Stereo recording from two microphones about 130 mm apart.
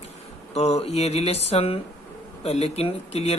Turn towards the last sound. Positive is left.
turn(degrees=50)  # may be behind; listen again after turning